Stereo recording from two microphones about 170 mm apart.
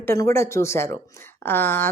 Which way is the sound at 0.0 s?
15° left (ahead or behind).